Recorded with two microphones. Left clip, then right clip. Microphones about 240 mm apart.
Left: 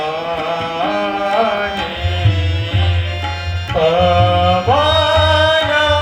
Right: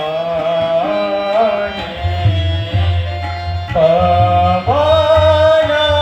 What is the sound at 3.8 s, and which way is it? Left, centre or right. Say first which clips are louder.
Music: right 2 dB; left.